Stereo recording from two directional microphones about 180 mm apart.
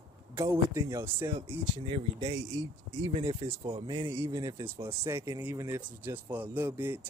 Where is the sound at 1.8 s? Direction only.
30° right (ahead or behind).